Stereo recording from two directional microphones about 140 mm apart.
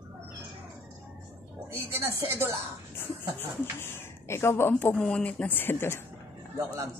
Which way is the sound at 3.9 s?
15° left (ahead or behind).